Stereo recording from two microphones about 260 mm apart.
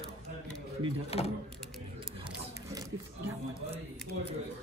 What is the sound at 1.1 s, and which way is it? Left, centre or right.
Speech, left.